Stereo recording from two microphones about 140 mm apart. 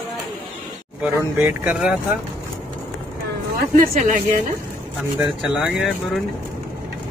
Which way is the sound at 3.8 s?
65° right (ahead or behind).